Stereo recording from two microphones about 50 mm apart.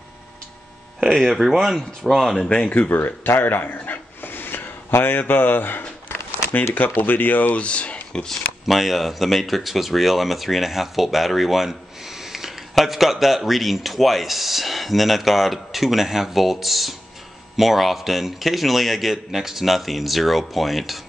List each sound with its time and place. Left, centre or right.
1.0 s speech: centre
2.4 s speech: centre
2.7 s speech: left
3.0 s dog: left
5.2 s speech: left
7.5 s speech: left
8.6 s speech: centre